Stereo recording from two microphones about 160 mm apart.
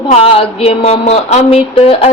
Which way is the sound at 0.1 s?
40° left (ahead or behind).